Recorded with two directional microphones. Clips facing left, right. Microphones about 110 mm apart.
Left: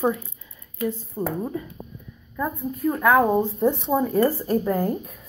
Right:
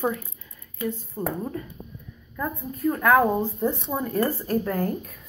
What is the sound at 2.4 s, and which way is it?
Speech, 5° left (ahead or behind).